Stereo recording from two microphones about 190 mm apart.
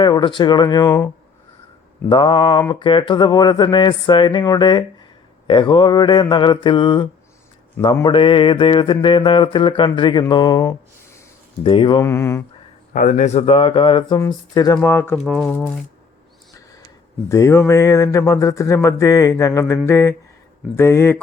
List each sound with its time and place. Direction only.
0.0 s mantra: 25° left (ahead or behind)
2.0 s mantra: 25° left (ahead or behind)
11.6 s mantra: 30° left (ahead or behind)
12.0 s speech: 15° left (ahead or behind)
12.9 s mantra: 45° left (ahead or behind); by 14.8 s 20° left (ahead or behind)
14.8 s speech: 10° left (ahead or behind)
17.2 s speech: 15° left (ahead or behind)